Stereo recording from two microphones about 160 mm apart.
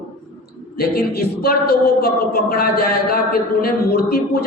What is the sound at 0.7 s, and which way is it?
A woman's voice, 70° left (ahead or behind).